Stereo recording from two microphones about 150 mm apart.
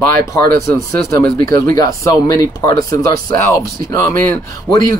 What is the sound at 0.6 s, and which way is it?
Speech, 20° left (ahead or behind).